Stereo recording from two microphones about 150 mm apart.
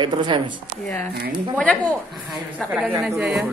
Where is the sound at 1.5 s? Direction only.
10° left (ahead or behind).